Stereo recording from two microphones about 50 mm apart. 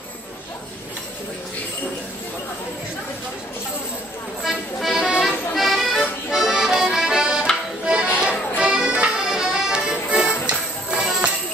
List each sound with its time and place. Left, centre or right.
4.4 s music: centre
5.2 s accordion: centre
7.8 s music: centre